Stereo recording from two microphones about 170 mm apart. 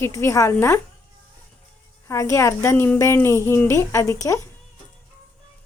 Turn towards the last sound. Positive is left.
turn(degrees=20)  # may be behind; listen again after turning